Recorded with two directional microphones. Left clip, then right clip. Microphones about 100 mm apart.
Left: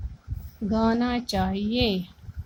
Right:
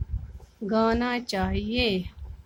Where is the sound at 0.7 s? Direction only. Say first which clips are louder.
Right 1 dB; 15° right (ahead or behind).